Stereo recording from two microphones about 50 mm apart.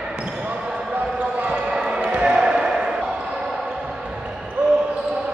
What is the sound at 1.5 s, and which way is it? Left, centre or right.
Basketball bounce, centre.